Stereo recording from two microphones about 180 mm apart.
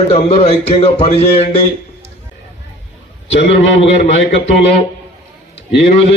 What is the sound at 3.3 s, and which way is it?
Speech, 35° left (ahead or behind).